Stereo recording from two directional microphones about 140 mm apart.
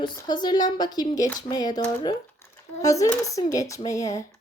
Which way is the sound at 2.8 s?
25° left (ahead or behind).